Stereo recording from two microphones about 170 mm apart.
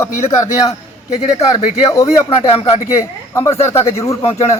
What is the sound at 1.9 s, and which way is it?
Speech, 20° left (ahead or behind).